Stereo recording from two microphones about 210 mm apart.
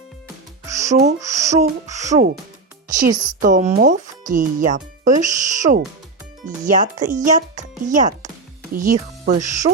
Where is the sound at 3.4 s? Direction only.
35° right (ahead or behind).